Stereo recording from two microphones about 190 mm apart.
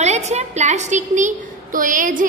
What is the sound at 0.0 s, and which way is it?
A woman's voice, 35° right (ahead or behind).